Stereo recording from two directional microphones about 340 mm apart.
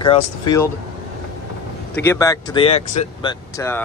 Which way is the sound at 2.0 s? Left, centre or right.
Centre.